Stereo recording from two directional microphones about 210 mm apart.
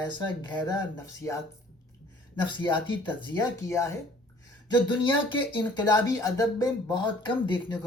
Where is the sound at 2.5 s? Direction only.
25° left (ahead or behind).